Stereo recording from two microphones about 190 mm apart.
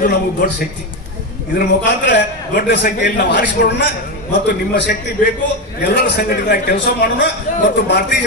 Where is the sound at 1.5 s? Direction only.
70° left (ahead or behind).